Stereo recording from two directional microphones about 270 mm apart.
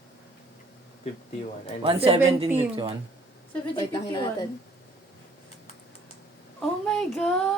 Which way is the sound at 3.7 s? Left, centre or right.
Centre.